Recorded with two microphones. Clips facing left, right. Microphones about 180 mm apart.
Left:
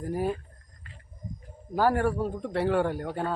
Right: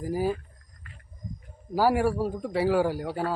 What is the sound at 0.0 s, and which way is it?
Speech, centre (ahead or behind).